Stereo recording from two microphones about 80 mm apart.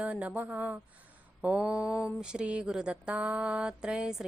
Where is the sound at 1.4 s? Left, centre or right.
Centre.